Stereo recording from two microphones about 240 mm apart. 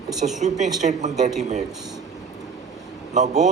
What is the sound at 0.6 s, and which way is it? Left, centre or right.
Speech, right.